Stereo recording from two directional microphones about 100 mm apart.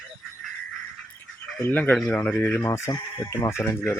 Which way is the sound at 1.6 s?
20° left (ahead or behind).